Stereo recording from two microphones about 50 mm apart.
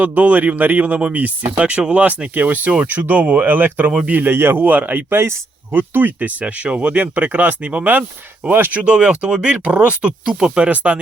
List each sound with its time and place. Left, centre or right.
0.0 s speech: right
5.1 s speech: right
5.7 s speech: right
8.8 s speech: centre